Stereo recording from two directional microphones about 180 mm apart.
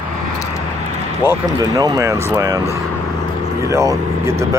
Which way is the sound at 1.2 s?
20° right (ahead or behind).